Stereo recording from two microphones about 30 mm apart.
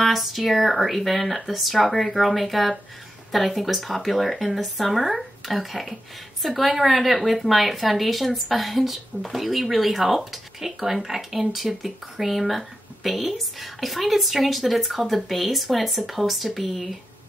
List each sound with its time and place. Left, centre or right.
0.0 s a woman's voice: centre